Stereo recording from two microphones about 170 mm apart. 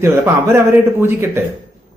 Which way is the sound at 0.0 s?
15° right (ahead or behind).